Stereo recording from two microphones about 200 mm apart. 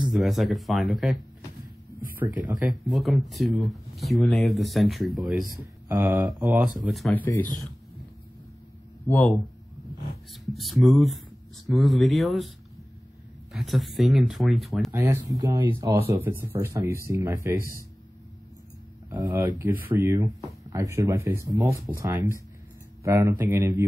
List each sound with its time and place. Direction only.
0.0 s speech: centre (ahead or behind)
2.1 s speech: 10° right (ahead or behind)
5.9 s speech: 10° right (ahead or behind); by 7.2 s 5° left (ahead or behind)
9.0 s speech: 10° left (ahead or behind)
10.3 s speech: centre (ahead or behind)
13.5 s speech: centre (ahead or behind)
14.9 s speech: 15° right (ahead or behind)
19.0 s speech: 15° right (ahead or behind)